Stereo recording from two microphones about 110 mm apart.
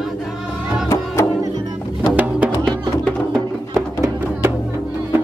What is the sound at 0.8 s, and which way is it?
Music, 30° left (ahead or behind).